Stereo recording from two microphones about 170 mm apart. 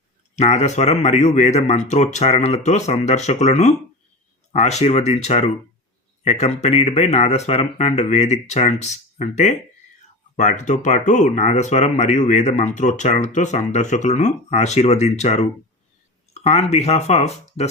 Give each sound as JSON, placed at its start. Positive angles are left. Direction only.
{"t": 0.3, "sound": "speech", "side_deg": 40}